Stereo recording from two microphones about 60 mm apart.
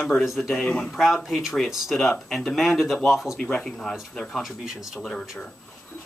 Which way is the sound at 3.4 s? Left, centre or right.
Centre.